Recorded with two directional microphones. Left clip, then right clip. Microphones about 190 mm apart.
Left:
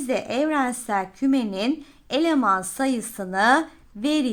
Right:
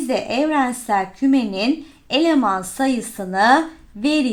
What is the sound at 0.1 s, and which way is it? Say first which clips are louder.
A woman's voice: right 3 dB; 30° left (ahead or behind).